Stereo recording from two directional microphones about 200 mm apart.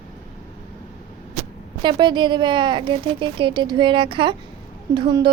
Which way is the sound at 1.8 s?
25° right (ahead or behind).